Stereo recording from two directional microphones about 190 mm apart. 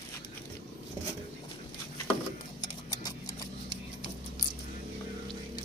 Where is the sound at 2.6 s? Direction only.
20° left (ahead or behind).